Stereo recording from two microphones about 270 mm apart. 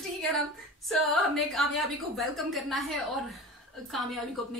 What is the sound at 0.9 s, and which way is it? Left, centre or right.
A woman's voice, centre.